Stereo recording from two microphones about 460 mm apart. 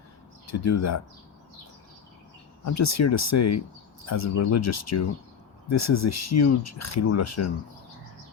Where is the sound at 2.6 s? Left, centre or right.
Left.